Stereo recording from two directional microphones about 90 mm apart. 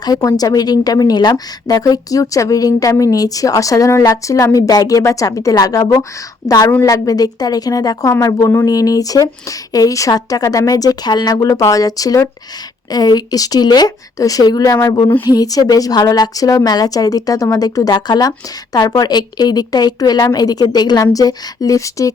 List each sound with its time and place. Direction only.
0.0 s a woman's voice: 45° left (ahead or behind)